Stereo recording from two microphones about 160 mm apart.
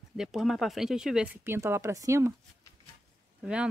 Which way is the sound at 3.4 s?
5° right (ahead or behind).